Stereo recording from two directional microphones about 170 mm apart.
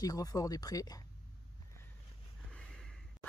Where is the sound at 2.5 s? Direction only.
5° left (ahead or behind).